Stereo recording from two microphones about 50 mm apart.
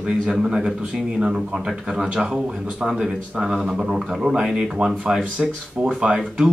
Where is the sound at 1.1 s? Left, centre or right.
Centre.